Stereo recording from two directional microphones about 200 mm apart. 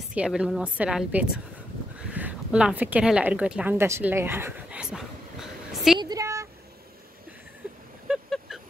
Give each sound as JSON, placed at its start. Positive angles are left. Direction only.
{"t": 0.1, "sound": "a woman's voice", "side_deg": -5}
{"t": 5.9, "sound": "a sound", "side_deg": -20}
{"t": 8.1, "sound": "vehicle", "side_deg": 0}